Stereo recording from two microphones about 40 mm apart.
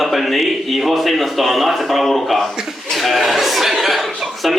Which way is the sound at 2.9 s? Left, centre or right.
Centre.